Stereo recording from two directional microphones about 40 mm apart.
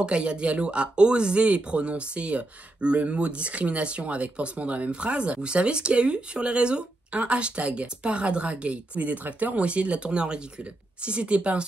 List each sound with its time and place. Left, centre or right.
0.0 s speech: right